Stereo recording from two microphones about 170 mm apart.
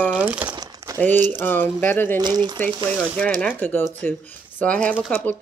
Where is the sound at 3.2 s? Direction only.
5° left (ahead or behind).